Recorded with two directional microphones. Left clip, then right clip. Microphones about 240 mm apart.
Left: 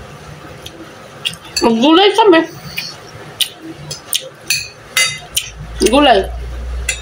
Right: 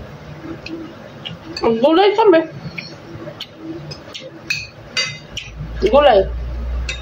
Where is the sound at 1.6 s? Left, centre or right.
Left.